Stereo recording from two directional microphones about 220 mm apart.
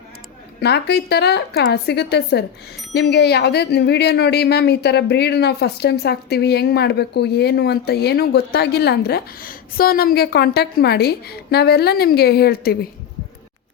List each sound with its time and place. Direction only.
0.6 s speech: 50° left (ahead or behind)